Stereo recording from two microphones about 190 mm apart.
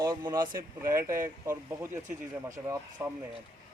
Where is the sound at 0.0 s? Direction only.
20° right (ahead or behind).